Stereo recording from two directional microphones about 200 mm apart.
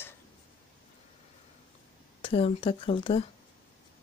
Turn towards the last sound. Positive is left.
turn(degrees=25)  # may be behind; listen again after turning